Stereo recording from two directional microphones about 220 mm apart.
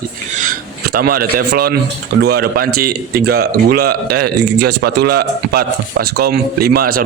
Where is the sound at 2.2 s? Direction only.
45° right (ahead or behind).